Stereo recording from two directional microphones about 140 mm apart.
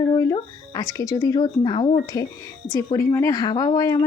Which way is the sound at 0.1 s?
25° left (ahead or behind).